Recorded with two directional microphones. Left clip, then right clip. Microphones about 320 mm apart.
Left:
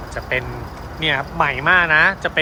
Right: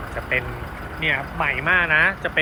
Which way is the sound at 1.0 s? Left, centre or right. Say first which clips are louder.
Left 4 dB; centre.